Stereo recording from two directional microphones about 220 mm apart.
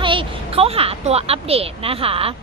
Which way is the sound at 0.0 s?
25° right (ahead or behind).